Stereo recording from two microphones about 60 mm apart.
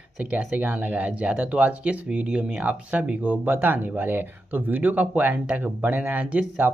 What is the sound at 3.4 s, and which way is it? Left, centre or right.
Speech, right.